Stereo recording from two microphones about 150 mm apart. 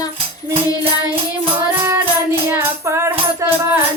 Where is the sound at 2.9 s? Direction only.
20° right (ahead or behind).